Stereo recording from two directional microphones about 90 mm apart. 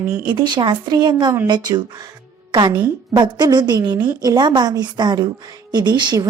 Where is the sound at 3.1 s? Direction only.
55° right (ahead or behind).